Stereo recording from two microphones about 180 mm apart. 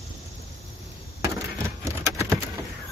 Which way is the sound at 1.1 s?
15° right (ahead or behind).